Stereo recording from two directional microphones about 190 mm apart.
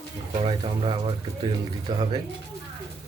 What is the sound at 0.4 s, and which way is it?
A man's voice, 30° right (ahead or behind).